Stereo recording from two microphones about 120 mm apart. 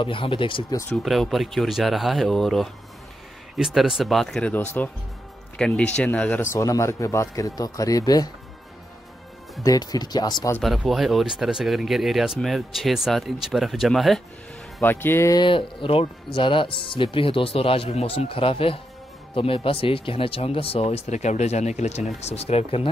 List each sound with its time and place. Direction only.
0.0 s speech: 45° left (ahead or behind)
1.0 s a man's voice: centre (ahead or behind); by 8.3 s 30° left (ahead or behind)
9.6 s speech: 30° left (ahead or behind)
10.6 s speech: centre (ahead or behind)
14.8 s a man's voice: 20° left (ahead or behind)
15.3 s speech: 45° left (ahead or behind)